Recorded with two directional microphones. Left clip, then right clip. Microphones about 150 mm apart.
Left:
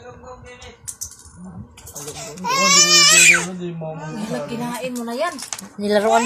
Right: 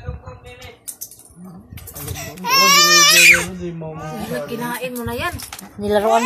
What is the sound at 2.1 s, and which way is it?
Baby cry, 15° right (ahead or behind).